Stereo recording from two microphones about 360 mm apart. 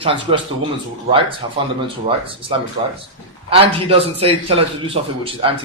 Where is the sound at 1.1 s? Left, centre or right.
Centre.